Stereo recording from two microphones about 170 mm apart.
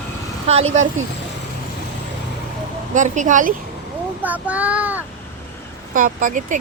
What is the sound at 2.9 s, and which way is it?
Speech, 45° right (ahead or behind).